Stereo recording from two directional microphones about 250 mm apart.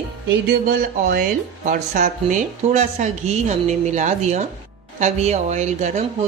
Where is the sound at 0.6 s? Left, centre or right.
Right.